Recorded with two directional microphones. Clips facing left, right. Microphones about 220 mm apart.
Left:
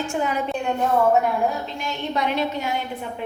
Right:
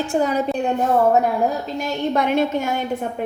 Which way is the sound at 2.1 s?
50° right (ahead or behind).